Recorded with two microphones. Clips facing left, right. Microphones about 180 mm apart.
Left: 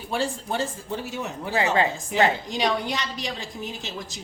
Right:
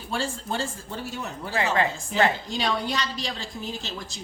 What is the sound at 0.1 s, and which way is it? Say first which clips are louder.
A woman's voice: left 2 dB; 15° left (ahead or behind).